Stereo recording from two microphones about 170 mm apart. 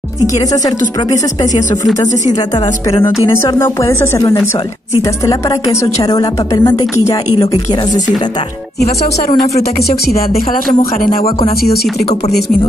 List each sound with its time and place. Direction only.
3.3 s speech: 15° left (ahead or behind)
5.2 s a woman's voice: 15° left (ahead or behind)
10.0 s speech: 60° left (ahead or behind)